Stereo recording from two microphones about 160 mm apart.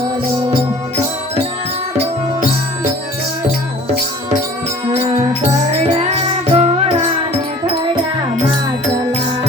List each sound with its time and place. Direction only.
6.5 s music: 40° right (ahead or behind)